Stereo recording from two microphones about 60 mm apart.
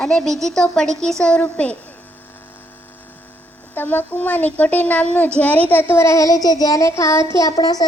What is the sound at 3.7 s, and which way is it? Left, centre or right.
A woman's voice, left.